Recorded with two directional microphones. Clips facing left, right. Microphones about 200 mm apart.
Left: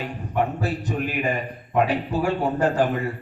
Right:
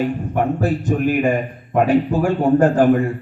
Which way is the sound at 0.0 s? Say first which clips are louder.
Right 6 dB; 50° right (ahead or behind).